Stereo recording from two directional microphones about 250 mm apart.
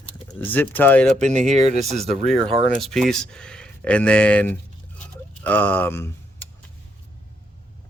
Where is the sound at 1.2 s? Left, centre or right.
Right.